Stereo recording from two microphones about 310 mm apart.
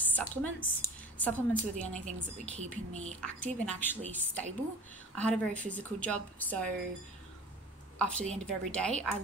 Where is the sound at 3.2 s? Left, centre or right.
Centre.